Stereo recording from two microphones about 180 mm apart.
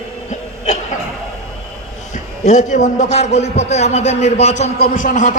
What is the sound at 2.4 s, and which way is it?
A man's voice, 40° left (ahead or behind).